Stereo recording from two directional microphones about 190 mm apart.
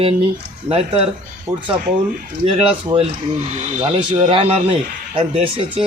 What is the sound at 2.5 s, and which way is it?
Speech, 30° right (ahead or behind).